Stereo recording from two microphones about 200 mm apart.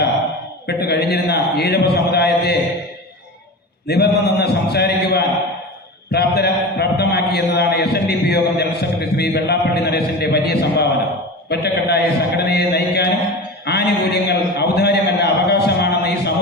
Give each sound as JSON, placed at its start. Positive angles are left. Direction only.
{"t": 0.7, "sound": "a man's voice", "side_deg": 55}
{"t": 3.8, "sound": "a man's voice", "side_deg": 55}